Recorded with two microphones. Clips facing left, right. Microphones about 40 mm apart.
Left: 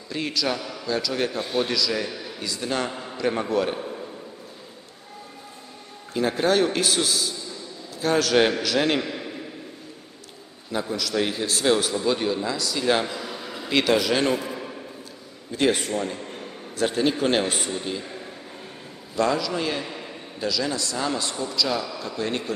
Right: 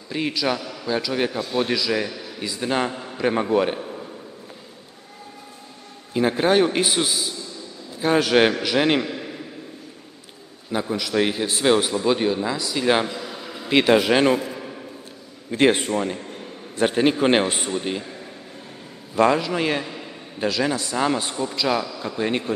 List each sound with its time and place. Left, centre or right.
0.1 s a man's voice: centre
6.1 s a man's voice: centre
10.7 s a man's voice: centre
13.3 s a sound: centre
13.7 s a man's voice: right
15.5 s a man's voice: right
19.1 s a man's voice: right